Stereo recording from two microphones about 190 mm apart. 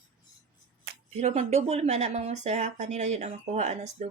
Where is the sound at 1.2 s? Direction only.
35° right (ahead or behind).